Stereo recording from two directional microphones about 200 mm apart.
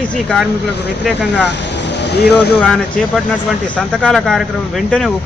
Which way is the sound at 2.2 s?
55° left (ahead or behind).